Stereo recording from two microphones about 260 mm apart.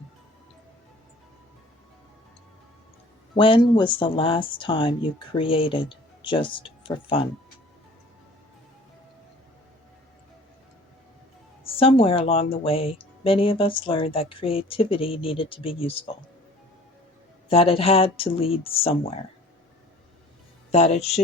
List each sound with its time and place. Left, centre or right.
3.3 s speech: centre
11.8 s speech: left
17.5 s speech: left
20.7 s speech: left